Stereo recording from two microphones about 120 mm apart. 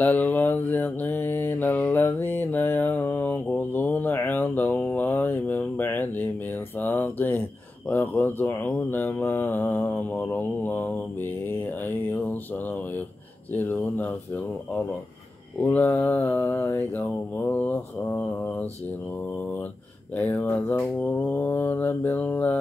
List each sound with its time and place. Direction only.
0.0 s mantra: 15° left (ahead or behind)
6.8 s a sound: 15° left (ahead or behind)
7.9 s speech: 15° left (ahead or behind)
10.2 s mantra: 15° left (ahead or behind)
13.5 s speech: 15° left (ahead or behind)
15.7 s speech: 15° left (ahead or behind)
17.5 s mantra: 10° left (ahead or behind)
20.2 s speech: 15° left (ahead or behind)